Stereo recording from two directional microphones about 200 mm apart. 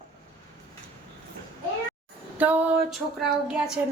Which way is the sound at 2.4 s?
10° right (ahead or behind).